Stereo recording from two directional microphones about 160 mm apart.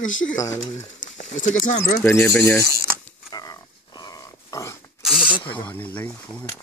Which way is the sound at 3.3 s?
25° left (ahead or behind).